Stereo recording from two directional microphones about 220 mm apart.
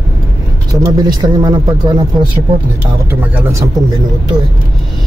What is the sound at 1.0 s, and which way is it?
Speech, 20° right (ahead or behind).